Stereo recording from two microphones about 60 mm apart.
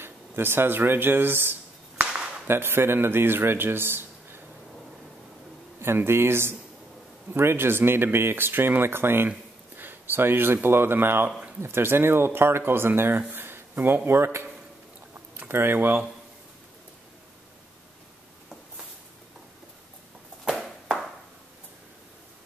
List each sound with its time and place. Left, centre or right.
0.0 s speech: right
2.0 s a sound: centre
2.4 s speech: right
5.8 s speech: right